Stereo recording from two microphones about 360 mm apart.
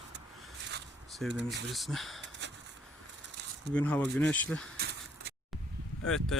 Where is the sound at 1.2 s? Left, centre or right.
Right.